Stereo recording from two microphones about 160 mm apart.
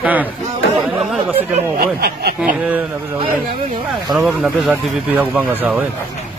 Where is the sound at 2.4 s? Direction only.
10° right (ahead or behind).